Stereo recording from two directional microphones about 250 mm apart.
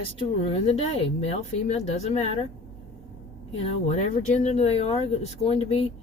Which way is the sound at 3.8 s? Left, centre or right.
Left.